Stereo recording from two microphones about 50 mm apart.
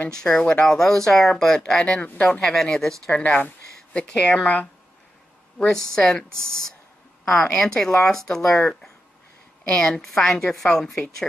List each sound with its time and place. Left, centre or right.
0.1 s speech: centre
2.0 s speech: left
2.4 s speech: centre
3.2 s a sound: left
4.1 s speech: centre
5.7 s speech: centre
9.7 s speech: centre
10.0 s a woman's voice: centre